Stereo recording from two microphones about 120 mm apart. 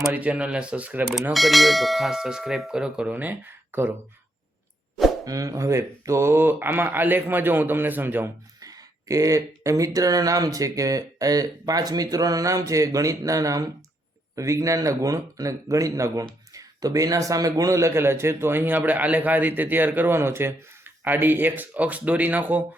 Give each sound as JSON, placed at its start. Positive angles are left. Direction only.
{"t": 0.1, "sound": "a man's voice", "side_deg": -10}
{"t": 1.3, "sound": "speech", "side_deg": 0}
{"t": 5.2, "sound": "a man's voice", "side_deg": -30}
{"t": 8.6, "sound": "a sound", "side_deg": -30}
{"t": 9.6, "sound": "a man's voice", "side_deg": -30}